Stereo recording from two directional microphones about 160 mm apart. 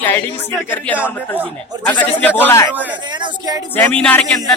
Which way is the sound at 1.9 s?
10° left (ahead or behind).